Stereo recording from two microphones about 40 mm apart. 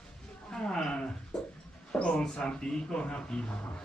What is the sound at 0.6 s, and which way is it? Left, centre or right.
Speech, centre.